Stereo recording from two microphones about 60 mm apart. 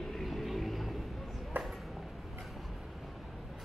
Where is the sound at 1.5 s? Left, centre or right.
Right.